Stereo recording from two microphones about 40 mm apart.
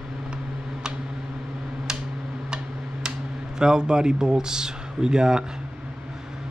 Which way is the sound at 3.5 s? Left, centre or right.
Centre.